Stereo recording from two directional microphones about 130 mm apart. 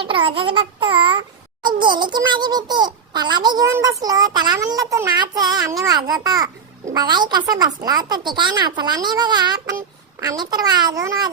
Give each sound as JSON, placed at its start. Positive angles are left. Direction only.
{"t": 0.0, "sound": "a child's voice", "side_deg": -40}